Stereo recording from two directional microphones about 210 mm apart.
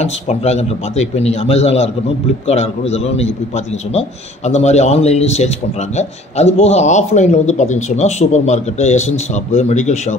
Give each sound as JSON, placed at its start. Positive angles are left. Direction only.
{"t": 0.0, "sound": "speech", "side_deg": 30}